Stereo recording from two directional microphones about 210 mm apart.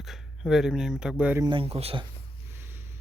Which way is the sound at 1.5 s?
25° right (ahead or behind).